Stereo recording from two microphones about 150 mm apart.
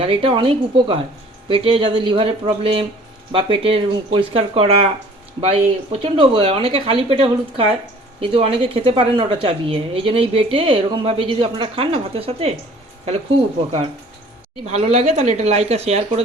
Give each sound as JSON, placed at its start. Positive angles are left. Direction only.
{"t": 0.0, "sound": "a woman's voice", "side_deg": -35}
{"t": 14.7, "sound": "speech", "side_deg": -45}